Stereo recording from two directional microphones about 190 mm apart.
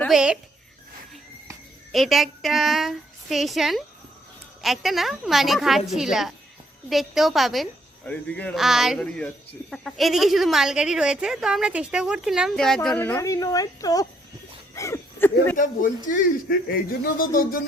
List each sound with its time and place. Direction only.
0.0 s speech: 5° right (ahead or behind)
1.9 s a woman's voice: centre (ahead or behind)
15.5 s speech: 45° left (ahead or behind)